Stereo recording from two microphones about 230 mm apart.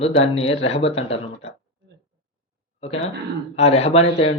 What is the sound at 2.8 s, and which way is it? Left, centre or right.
Speech, left.